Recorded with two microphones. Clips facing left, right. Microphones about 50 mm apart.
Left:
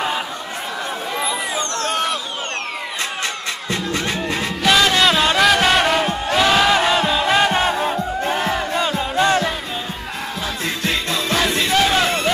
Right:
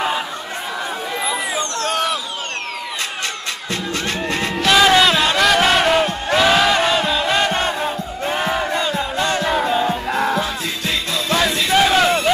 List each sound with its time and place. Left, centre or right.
1.2 s a sound: centre
4.4 s music: centre
4.9 s chant: centre
6.2 s battle cry: centre
8.3 s battle cry: centre
9.1 s music: centre
11.4 s music: left
11.7 s battle cry: centre